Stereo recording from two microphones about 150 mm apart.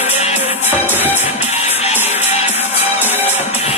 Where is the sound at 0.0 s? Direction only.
45° left (ahead or behind).